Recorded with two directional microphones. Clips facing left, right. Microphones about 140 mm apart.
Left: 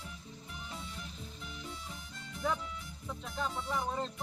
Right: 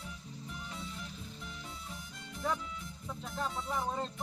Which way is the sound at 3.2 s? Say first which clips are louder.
Even; centre (ahead or behind).